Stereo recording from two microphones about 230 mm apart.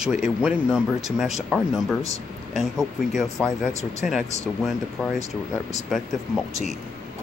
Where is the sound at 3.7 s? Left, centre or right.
Left.